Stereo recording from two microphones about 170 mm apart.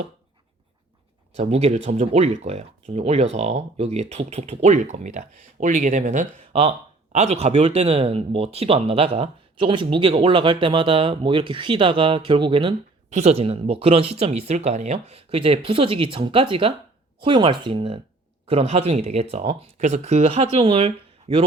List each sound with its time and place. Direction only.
1.4 s speech: 40° right (ahead or behind)